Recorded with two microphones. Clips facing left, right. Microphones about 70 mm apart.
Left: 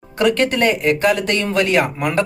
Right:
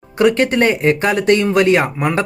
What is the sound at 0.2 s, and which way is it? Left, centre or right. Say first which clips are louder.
Speech: right 3 dB; right.